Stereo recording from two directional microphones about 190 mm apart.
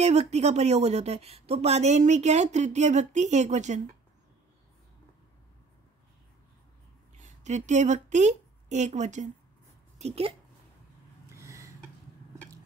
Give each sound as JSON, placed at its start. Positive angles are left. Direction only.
{"t": 0.0, "sound": "a woman's voice", "side_deg": -35}
{"t": 7.2, "sound": "a woman's voice", "side_deg": -40}
{"t": 11.3, "sound": "a sound", "side_deg": -15}